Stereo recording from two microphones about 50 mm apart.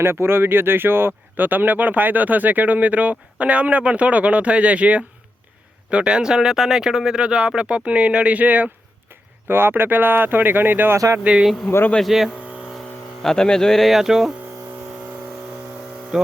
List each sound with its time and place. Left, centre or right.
0.0 s speech: right
9.5 s speech: right
11.2 s speech: right
11.7 s speech: left
12.0 s speech: centre
13.2 s speech: centre
16.1 s a sound: centre